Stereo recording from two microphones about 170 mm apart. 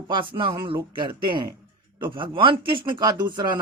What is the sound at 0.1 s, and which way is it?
Speech, 30° right (ahead or behind).